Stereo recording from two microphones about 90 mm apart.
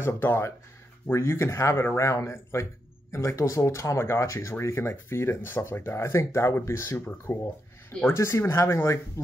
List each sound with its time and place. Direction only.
0.0 s speech: 25° left (ahead or behind)